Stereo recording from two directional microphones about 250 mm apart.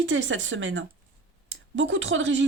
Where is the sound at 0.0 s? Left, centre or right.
Right.